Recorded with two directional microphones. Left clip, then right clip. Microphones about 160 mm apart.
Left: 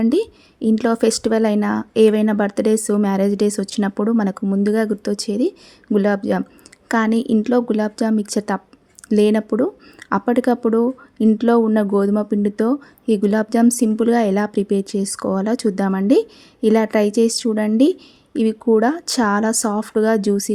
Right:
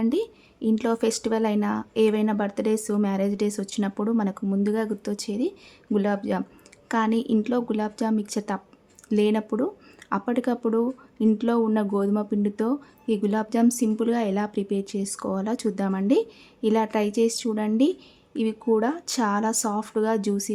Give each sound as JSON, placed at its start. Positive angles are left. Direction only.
{"t": 0.0, "sound": "speech", "side_deg": 35}